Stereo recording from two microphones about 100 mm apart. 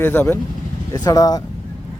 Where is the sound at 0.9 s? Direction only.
40° left (ahead or behind).